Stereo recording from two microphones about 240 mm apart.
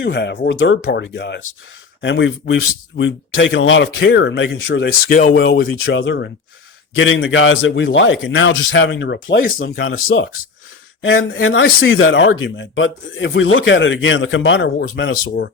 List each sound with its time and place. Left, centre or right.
0.0 s speech: left
5.7 s speech: left